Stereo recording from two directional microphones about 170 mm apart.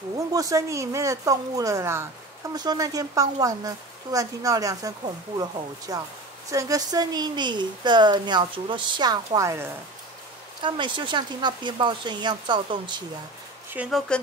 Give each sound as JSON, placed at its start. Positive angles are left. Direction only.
{"t": 0.3, "sound": "speech", "side_deg": -20}
{"t": 10.6, "sound": "speech", "side_deg": -30}
{"t": 13.7, "sound": "speech", "side_deg": 0}